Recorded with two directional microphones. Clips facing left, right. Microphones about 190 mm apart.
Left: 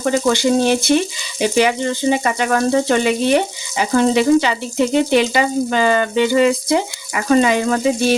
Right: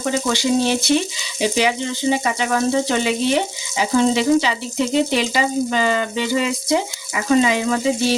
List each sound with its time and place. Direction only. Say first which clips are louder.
0.3 s frying: left 3 dB; 55° left (ahead or behind)
1.4 s speech: left 3 dB; 55° left (ahead or behind)